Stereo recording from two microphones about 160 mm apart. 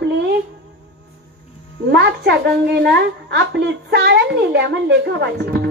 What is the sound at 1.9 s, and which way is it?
A woman's voice, 90° right.